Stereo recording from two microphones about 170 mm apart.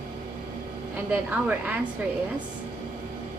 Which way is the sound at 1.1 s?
10° right (ahead or behind).